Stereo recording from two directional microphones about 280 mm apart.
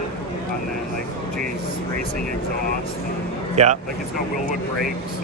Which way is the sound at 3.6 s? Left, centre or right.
Right.